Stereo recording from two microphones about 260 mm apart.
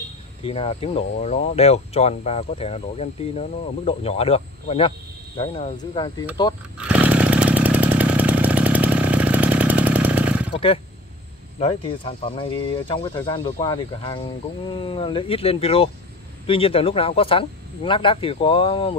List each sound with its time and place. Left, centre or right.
0.5 s speech: left
6.8 s chainsaw: centre
11.6 s speech: centre